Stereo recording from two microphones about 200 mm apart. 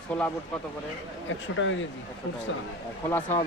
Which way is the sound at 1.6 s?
65° left (ahead or behind).